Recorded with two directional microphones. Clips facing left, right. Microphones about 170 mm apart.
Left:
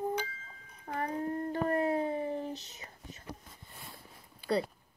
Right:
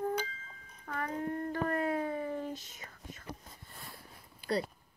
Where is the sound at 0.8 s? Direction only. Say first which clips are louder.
Left 2 dB; 30° left (ahead or behind).